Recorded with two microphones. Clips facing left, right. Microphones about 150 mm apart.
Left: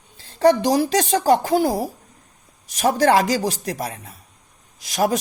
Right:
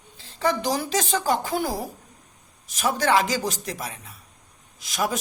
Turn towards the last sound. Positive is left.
turn(degrees=35)  # may be behind; listen again after turning